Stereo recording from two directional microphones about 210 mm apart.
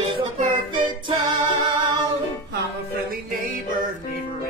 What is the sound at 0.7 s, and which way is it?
Music, 20° right (ahead or behind).